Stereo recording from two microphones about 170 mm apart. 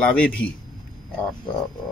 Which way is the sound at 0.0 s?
5° left (ahead or behind).